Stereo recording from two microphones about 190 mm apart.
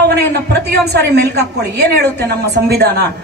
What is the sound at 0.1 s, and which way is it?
A woman's voice, 60° right (ahead or behind).